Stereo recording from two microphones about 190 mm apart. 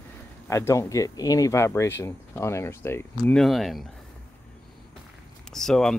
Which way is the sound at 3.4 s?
Centre (ahead or behind).